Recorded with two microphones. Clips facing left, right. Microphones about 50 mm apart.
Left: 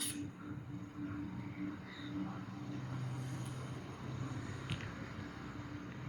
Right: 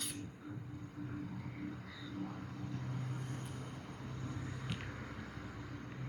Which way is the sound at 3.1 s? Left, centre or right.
Right.